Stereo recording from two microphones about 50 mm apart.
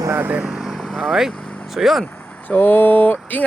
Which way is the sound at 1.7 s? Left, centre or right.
Centre.